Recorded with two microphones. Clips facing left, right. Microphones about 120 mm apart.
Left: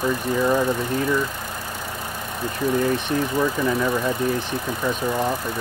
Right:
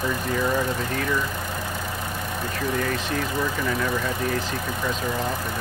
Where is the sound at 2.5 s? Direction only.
20° left (ahead or behind).